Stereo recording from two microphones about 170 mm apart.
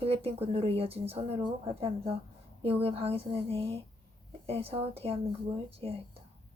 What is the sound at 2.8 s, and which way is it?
Speech, 35° right (ahead or behind).